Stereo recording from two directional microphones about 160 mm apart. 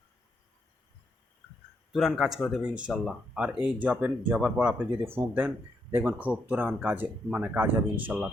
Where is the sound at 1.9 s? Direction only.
Centre (ahead or behind).